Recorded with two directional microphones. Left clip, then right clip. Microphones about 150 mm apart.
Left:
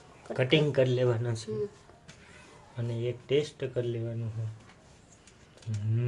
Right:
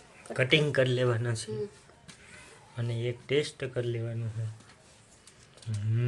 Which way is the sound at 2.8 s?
Centre (ahead or behind).